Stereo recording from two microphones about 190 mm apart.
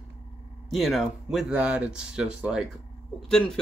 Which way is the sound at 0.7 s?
Centre (ahead or behind).